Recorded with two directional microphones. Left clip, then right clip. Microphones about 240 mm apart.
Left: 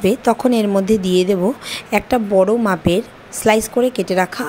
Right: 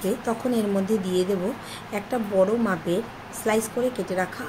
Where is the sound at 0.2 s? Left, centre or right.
Left.